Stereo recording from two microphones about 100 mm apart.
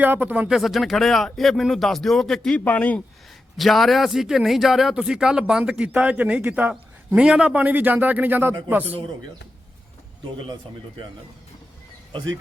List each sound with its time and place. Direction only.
0.0 s a man's voice: 15° right (ahead or behind)
0.4 s speech: centre (ahead or behind)
2.6 s speech: 15° left (ahead or behind)
3.6 s a man's voice: centre (ahead or behind); by 8.5 s 20° right (ahead or behind)